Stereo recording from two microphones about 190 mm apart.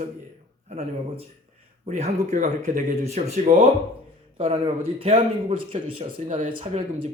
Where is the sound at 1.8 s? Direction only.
35° right (ahead or behind).